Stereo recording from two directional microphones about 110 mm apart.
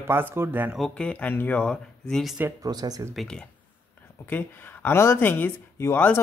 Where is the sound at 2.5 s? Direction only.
35° right (ahead or behind).